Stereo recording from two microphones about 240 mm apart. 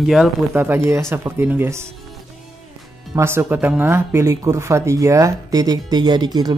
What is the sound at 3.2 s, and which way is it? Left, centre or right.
Speech, centre.